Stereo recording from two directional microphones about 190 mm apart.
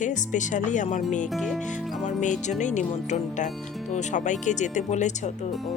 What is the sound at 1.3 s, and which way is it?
Speech, centre (ahead or behind).